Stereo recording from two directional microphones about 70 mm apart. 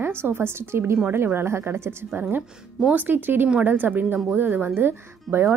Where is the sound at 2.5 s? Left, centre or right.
Centre.